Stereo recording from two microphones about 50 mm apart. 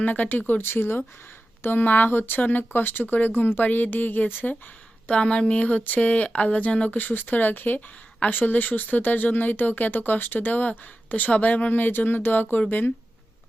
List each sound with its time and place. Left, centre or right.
0.0 s speech: left
5.1 s speech: left
6.9 s speech: left